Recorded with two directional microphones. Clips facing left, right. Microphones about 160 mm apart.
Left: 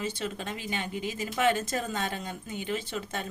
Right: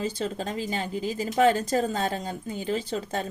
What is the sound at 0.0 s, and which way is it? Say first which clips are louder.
Speech: right 4 dB; 35° right (ahead or behind).